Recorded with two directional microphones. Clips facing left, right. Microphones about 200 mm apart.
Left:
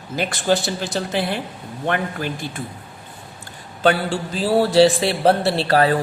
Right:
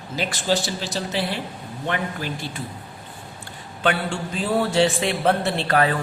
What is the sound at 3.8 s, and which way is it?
A man's voice, 35° left (ahead or behind).